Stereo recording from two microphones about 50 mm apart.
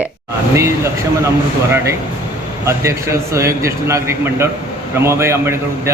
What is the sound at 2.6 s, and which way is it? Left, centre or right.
A man's voice, right.